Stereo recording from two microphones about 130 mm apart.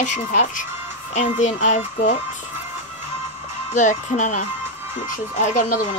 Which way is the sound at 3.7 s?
70° left (ahead or behind).